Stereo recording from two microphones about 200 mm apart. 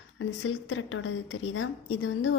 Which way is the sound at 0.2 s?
85° left.